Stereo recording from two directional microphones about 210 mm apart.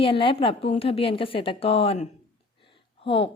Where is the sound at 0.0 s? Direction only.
25° left (ahead or behind).